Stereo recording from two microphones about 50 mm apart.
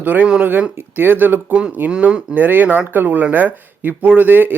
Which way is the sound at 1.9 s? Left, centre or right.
Right.